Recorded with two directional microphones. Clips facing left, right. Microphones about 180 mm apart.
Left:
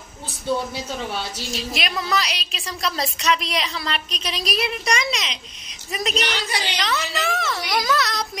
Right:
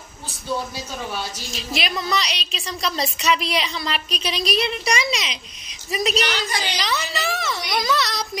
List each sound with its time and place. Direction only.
1.7 s a woman's voice: centre (ahead or behind)